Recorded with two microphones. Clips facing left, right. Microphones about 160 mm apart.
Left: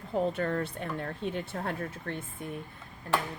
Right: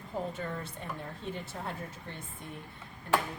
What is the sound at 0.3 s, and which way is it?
Speech, 65° left (ahead or behind).